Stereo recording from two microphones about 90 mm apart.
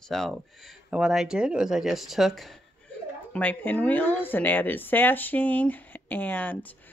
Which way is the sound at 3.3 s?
20° left (ahead or behind).